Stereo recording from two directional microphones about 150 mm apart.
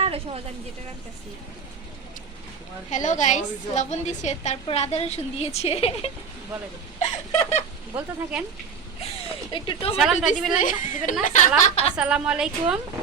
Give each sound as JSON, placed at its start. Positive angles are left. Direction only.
{"t": 0.0, "sound": "a sound", "side_deg": -40}
{"t": 2.9, "sound": "a woman's voice", "side_deg": 55}
{"t": 7.9, "sound": "a woman's voice", "side_deg": -10}
{"t": 9.5, "sound": "speech", "side_deg": 35}
{"t": 10.0, "sound": "a woman's voice", "side_deg": 0}
{"t": 10.6, "sound": "a woman's voice", "side_deg": 60}
{"t": 11.9, "sound": "a woman's voice", "side_deg": -5}